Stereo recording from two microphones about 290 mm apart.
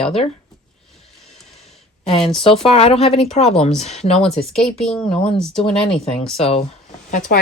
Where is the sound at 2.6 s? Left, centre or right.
Centre.